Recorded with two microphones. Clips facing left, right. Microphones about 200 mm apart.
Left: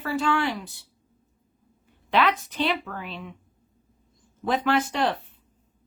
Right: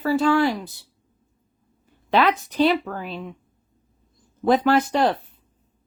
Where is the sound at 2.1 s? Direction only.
35° right (ahead or behind).